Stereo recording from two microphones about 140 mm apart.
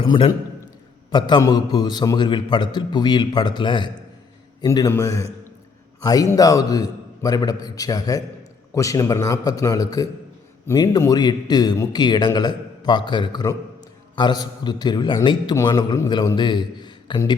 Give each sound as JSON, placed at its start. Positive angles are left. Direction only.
{"t": 0.0, "sound": "a man's voice", "side_deg": 35}